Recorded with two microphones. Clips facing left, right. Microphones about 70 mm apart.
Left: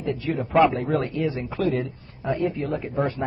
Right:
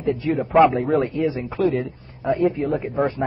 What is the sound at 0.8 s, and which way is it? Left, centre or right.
Speech, centre.